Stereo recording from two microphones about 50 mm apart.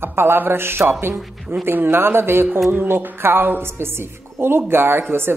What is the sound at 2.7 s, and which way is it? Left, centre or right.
A woman's voice, right.